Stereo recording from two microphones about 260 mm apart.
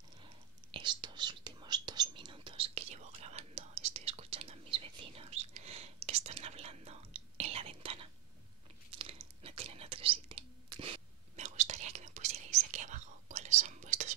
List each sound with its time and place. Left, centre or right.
0.7 s whispering: centre